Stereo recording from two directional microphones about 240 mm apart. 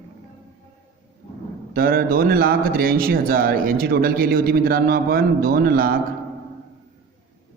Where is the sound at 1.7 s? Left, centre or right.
Right.